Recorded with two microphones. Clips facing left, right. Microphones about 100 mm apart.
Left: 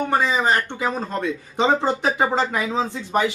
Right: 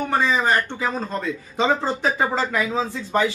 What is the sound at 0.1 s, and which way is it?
Speech, 15° left (ahead or behind).